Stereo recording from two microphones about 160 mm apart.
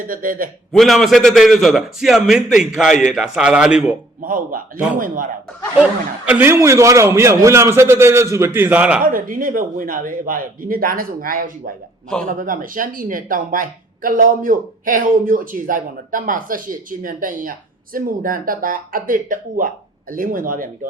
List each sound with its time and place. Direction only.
0.1 s speech: 60° right (ahead or behind)
0.7 s a man's voice: centre (ahead or behind)
4.2 s speech: 60° right (ahead or behind)
6.2 s a man's voice: 10° right (ahead or behind)
9.1 s speech: 60° right (ahead or behind)